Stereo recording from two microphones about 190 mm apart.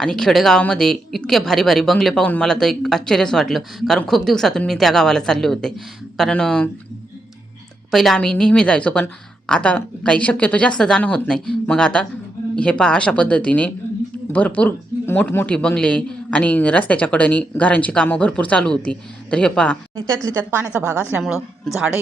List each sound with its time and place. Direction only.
0.0 s speech: 5° left (ahead or behind)
7.9 s speech: centre (ahead or behind)
20.2 s a woman's voice: 15° right (ahead or behind)